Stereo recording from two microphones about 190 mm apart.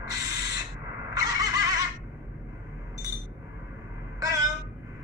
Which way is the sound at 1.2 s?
20° right (ahead or behind).